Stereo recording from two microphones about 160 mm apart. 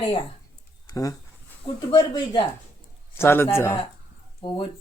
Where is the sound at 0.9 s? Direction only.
20° left (ahead or behind).